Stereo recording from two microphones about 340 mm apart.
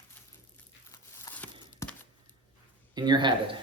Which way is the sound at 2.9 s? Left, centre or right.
Centre.